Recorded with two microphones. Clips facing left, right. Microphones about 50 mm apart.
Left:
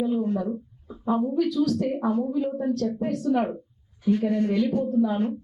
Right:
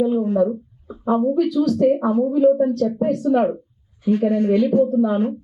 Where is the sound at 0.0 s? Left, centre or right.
Centre.